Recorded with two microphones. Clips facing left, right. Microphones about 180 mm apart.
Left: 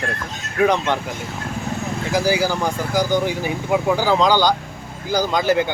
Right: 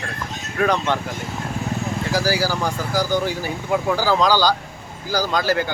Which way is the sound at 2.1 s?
20° left (ahead or behind).